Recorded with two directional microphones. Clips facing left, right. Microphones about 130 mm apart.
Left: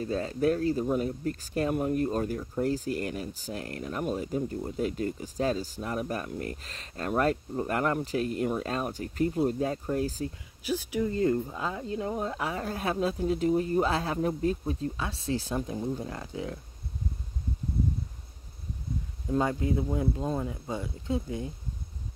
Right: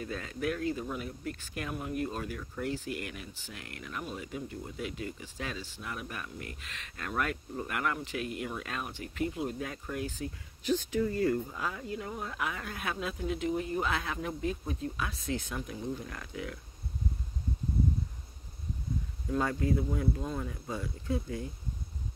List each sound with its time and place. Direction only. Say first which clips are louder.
0.0 s speech: left 8 dB; 35° left (ahead or behind)
10.6 s speech: even; 10° left (ahead or behind)
11.1 s speech: left 6 dB; 25° left (ahead or behind)
19.3 s speech: left 3 dB; 20° left (ahead or behind)